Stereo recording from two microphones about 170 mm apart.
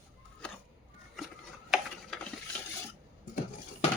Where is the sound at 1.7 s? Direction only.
Centre (ahead or behind).